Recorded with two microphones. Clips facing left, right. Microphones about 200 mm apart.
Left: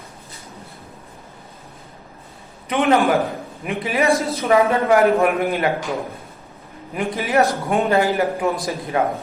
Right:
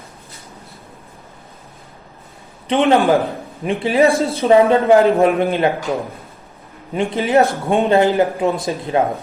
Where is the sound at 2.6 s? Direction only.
25° right (ahead or behind).